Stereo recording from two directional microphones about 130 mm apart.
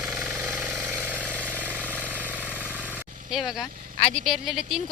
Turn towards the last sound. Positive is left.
turn(degrees=0)  # may be behind; listen again after turning